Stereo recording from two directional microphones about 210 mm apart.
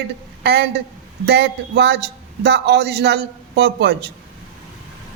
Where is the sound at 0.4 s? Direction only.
55° right (ahead or behind).